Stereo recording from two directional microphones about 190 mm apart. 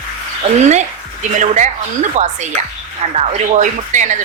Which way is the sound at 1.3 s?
40° right (ahead or behind).